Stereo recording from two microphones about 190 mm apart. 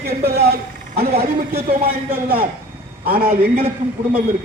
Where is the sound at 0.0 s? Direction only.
55° right (ahead or behind).